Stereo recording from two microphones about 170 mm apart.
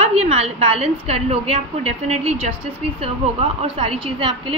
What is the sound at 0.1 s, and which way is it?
A woman's voice, 40° right (ahead or behind).